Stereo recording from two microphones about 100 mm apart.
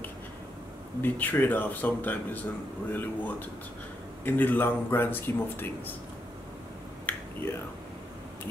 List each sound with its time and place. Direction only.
1.0 s speech: 20° left (ahead or behind)
7.1 s finger snapping: 25° left (ahead or behind)